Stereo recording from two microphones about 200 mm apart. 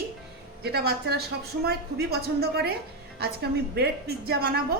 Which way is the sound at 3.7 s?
50° right (ahead or behind).